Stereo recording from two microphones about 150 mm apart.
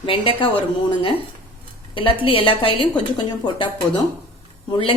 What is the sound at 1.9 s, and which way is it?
A woman's voice, 35° left (ahead or behind).